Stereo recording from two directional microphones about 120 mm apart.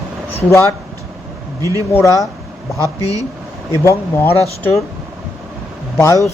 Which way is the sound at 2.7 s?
30° right (ahead or behind).